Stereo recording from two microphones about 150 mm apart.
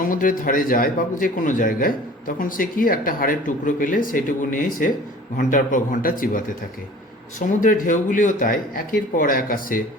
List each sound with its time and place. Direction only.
0.0 s a man's voice: 65° left (ahead or behind)